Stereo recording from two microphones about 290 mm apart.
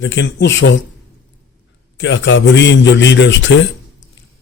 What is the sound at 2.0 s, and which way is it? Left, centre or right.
A man's voice, left.